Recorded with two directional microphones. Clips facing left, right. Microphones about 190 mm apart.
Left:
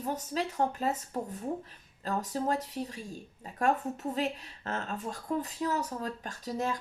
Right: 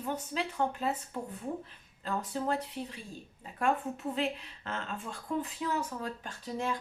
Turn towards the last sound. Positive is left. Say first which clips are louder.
# left 2 dB
turn(degrees=40)  # may be behind; listen again after turning